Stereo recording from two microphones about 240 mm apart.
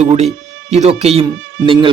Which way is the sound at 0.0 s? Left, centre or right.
Right.